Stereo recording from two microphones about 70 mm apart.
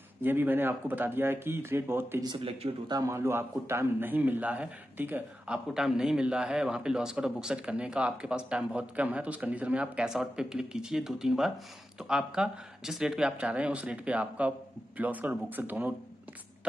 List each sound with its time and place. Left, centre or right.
0.2 s speech: right
5.5 s speech: centre; by 15.9 s right